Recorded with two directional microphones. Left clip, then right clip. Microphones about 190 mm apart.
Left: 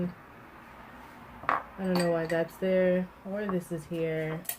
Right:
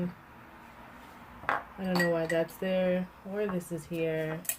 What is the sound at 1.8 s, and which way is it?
Speech, 35° right (ahead or behind).